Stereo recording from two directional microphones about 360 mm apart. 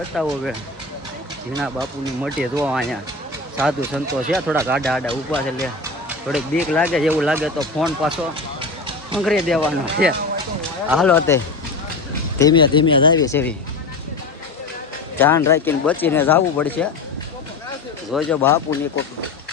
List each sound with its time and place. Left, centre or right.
0.1 s speech: centre
1.6 s speech: centre
9.1 s speech: centre
10.0 s speech: right
10.8 s speech: centre
12.4 s speech: centre
15.2 s speech: centre
18.1 s speech: centre